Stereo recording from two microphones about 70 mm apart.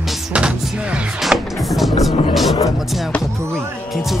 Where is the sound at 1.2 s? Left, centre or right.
Centre.